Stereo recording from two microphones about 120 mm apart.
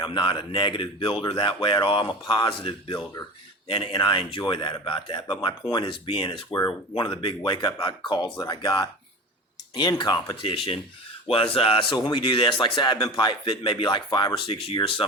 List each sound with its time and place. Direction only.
0.0 s speech: 40° left (ahead or behind)